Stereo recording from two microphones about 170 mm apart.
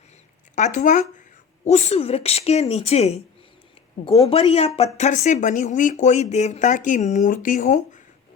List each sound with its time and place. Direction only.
0.5 s a woman's voice: 50° left (ahead or behind)